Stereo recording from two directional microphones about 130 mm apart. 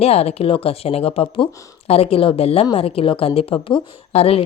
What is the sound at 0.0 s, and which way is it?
Speech, 50° left (ahead or behind).